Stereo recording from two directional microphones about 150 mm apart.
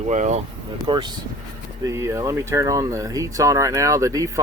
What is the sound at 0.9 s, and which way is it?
Speech, 30° right (ahead or behind).